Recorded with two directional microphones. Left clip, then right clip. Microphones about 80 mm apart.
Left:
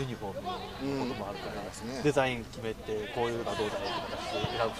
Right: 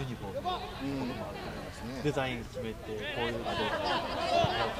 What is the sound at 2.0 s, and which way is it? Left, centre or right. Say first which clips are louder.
Speech: left 5 dB; left.